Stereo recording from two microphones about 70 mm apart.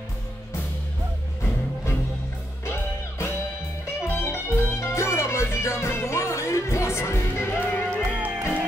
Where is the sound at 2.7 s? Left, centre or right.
Left.